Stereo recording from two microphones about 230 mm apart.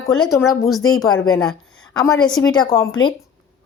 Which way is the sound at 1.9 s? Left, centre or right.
Centre.